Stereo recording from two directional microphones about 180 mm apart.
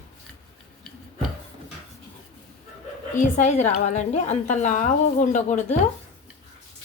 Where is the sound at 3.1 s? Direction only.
40° left (ahead or behind).